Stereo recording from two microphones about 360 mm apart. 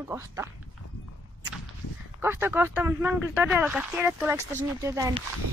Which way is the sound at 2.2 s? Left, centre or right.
Centre.